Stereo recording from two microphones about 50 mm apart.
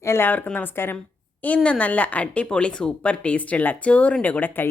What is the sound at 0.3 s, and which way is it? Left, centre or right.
A woman's voice, left.